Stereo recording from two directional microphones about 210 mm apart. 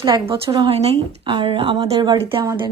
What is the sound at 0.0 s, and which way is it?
A woman's voice, 25° right (ahead or behind).